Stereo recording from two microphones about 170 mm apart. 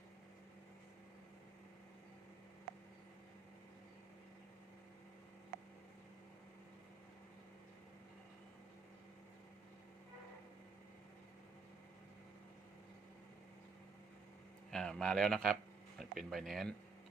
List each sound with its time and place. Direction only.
14.7 s a man's voice: 5° left (ahead or behind)